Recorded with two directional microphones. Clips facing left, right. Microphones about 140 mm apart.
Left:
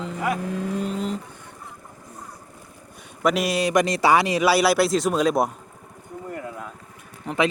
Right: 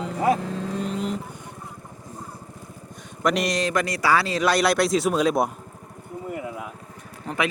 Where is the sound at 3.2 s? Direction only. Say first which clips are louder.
Left 1 dB; 5° left (ahead or behind).